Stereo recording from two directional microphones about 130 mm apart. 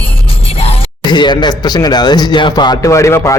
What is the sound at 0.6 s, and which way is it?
Speech, 45° left (ahead or behind).